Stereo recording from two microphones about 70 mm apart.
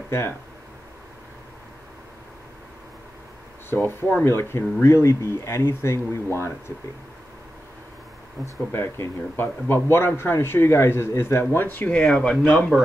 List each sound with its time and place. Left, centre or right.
3.7 s a man's voice: left
8.4 s speech: right
8.7 s a man's voice: left
12.0 s speech: centre